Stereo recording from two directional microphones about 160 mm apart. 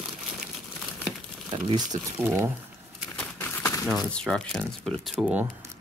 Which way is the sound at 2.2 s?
15° right (ahead or behind).